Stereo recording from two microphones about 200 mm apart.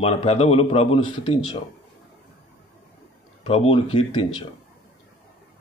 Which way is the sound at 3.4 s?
30° left (ahead or behind).